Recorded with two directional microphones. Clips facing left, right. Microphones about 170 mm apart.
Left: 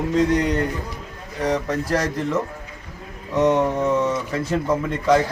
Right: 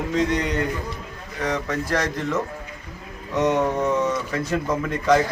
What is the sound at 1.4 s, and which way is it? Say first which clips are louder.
Speech: left 3 dB; 35° left (ahead or behind).